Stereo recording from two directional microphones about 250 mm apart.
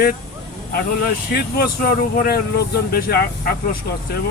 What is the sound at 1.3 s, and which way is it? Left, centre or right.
Speech, left.